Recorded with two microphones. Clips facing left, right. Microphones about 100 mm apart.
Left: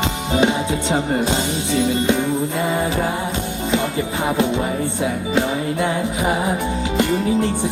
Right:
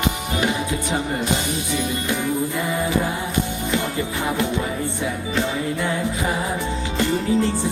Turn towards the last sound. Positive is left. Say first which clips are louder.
# left 2 dB
turn(degrees=20)  # may be behind; listen again after turning